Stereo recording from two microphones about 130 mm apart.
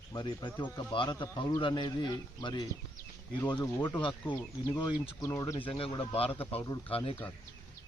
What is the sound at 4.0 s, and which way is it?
Speech, 40° left (ahead or behind).